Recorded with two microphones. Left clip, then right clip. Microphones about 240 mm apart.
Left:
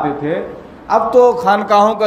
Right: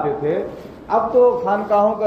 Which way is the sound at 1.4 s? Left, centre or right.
Left.